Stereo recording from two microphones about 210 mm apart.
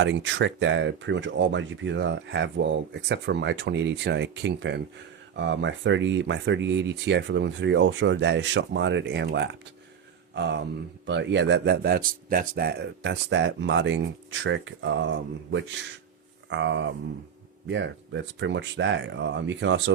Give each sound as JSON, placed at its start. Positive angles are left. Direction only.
{"t": 0.0, "sound": "speech", "side_deg": -60}